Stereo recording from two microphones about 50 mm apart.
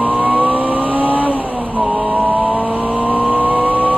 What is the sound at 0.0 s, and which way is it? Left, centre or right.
Vehicle, right.